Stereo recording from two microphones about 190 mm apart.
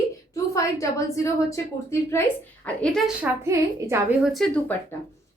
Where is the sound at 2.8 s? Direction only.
5° left (ahead or behind).